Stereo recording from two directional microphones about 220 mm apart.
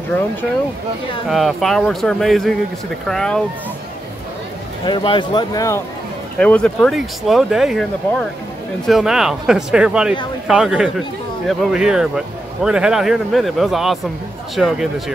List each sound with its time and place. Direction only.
1.3 s speech: centre (ahead or behind)
4.8 s speech: 20° left (ahead or behind)
6.4 s speech: 5° left (ahead or behind)